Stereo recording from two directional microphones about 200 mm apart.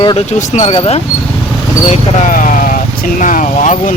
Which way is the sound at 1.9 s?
40° left (ahead or behind).